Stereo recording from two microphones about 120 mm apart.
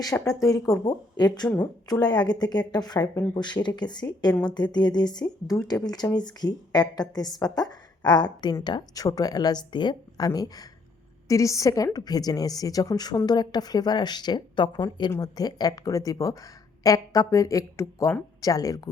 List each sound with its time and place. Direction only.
0.3 s a woman's voice: 30° left (ahead or behind)